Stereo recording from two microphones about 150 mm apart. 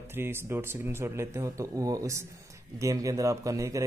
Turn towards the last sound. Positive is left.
turn(degrees=-20)  # may be behind; listen again after turning